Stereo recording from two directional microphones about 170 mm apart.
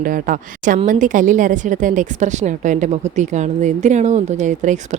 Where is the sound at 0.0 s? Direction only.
55° right (ahead or behind).